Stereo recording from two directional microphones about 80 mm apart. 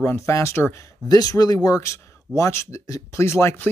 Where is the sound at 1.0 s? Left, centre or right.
Left.